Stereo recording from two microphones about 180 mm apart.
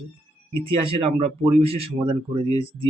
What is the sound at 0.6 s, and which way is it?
Speech, 30° right (ahead or behind).